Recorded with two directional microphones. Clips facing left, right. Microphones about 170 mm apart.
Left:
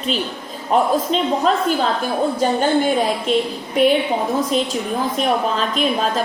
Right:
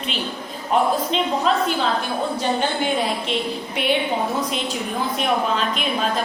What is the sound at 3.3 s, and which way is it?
Speech, 45° left (ahead or behind).